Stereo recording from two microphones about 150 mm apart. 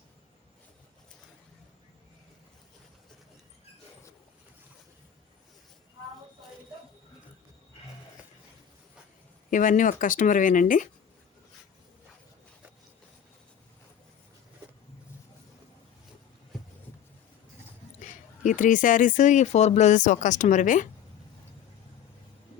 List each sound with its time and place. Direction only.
9.5 s speech: 60° left (ahead or behind)
18.0 s speech: 60° left (ahead or behind)